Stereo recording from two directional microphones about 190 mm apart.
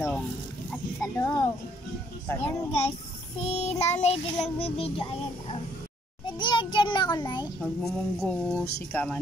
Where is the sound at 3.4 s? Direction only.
35° left (ahead or behind).